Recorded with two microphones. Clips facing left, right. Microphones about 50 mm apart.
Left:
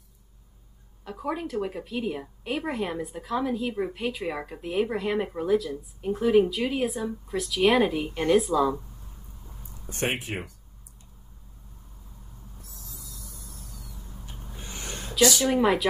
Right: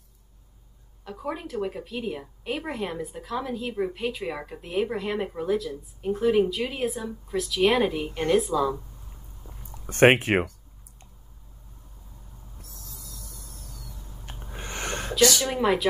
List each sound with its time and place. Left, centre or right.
1.0 s speech: centre
9.7 s speech: right
12.5 s a sound: right
15.4 s speech: centre